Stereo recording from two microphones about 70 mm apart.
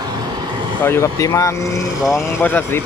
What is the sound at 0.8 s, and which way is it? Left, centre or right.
Speech, left.